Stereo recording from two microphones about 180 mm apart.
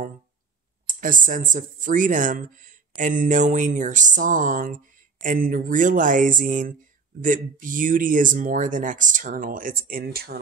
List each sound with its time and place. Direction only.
0.8 s speech: 45° right (ahead or behind)